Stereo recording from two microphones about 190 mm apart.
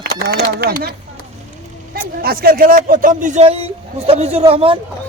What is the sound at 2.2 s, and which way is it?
Speech, 50° right (ahead or behind).